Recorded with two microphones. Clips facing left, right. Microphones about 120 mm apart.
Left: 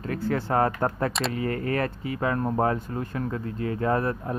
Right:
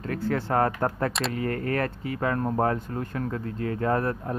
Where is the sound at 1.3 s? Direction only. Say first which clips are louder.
Even; 10° left (ahead or behind).